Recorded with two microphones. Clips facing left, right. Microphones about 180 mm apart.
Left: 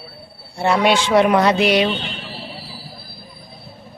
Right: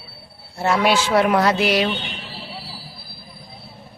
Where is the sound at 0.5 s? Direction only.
5° right (ahead or behind).